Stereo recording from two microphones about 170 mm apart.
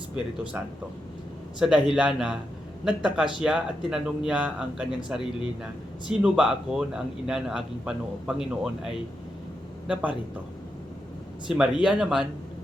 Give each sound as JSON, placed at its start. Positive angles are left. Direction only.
{"t": 1.5, "sound": "a man's voice", "side_deg": -5}
{"t": 6.1, "sound": "a man's voice", "side_deg": -5}
{"t": 11.4, "sound": "a man's voice", "side_deg": -5}